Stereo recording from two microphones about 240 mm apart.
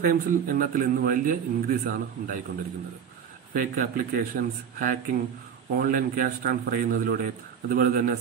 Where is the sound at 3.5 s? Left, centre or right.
Right.